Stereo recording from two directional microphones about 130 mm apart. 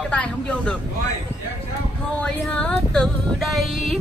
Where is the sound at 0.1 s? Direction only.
10° left (ahead or behind).